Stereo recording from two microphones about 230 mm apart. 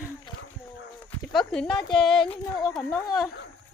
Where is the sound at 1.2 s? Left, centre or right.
Centre.